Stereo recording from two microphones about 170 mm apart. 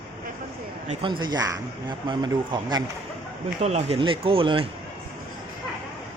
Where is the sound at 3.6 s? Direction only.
40° right (ahead or behind).